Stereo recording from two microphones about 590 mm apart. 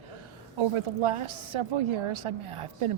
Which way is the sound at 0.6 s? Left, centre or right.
Right.